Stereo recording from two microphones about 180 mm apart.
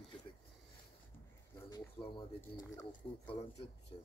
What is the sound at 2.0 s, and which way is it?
Speech, 10° left (ahead or behind).